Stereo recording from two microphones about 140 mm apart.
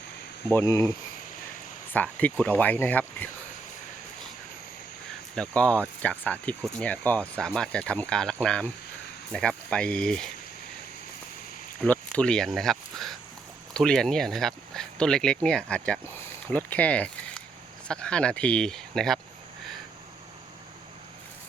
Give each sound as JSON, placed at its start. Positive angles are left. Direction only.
{"t": 0.4, "sound": "speech", "side_deg": 20}
{"t": 5.3, "sound": "speech", "side_deg": 5}
{"t": 11.8, "sound": "speech", "side_deg": 10}